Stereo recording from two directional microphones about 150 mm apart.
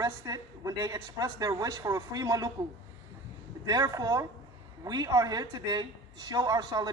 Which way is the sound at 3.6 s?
25° right (ahead or behind).